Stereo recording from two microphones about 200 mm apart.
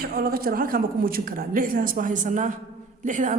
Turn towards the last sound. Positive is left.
turn(degrees=-40)  # may be behind; listen again after turning